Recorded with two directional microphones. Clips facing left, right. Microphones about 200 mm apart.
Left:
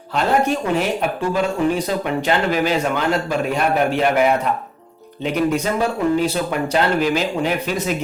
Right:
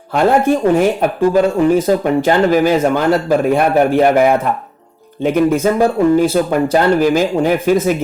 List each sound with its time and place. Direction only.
0.1 s speech: 50° right (ahead or behind)